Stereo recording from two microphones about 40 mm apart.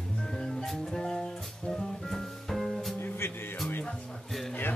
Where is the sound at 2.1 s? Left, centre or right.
Centre.